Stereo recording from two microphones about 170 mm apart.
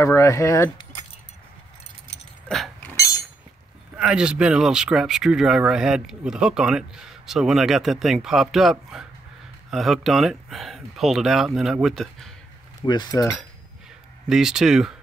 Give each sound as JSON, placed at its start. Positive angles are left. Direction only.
{"t": 0.0, "sound": "speech", "side_deg": 15}
{"t": 2.4, "sound": "a sound", "side_deg": 0}
{"t": 3.9, "sound": "speech", "side_deg": -5}
{"t": 12.8, "sound": "speech", "side_deg": 25}
{"t": 14.3, "sound": "speech", "side_deg": -5}